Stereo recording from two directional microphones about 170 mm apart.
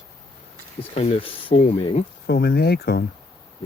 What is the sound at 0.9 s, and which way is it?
Speech, 35° left (ahead or behind).